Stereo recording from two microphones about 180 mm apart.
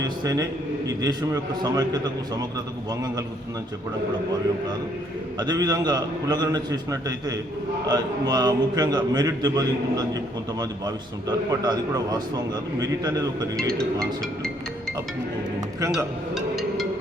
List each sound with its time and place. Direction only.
0.2 s a man's voice: 20° right (ahead or behind)
5.4 s a man's voice: 20° right (ahead or behind)
13.6 s music: 5° left (ahead or behind)
16.3 s music: centre (ahead or behind)